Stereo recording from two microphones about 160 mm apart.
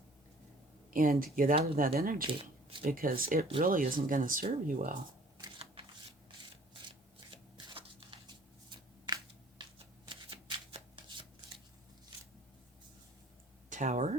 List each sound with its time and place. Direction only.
0.9 s speech: 60° right (ahead or behind)
2.2 s a sound: 35° right (ahead or behind)
2.8 s speech: 65° right (ahead or behind)
5.4 s shuffling cards: 35° right (ahead or behind)
6.8 s shuffling cards: 30° right (ahead or behind)
9.6 s shuffling cards: 35° right (ahead or behind)
13.7 s a sound: 50° right (ahead or behind)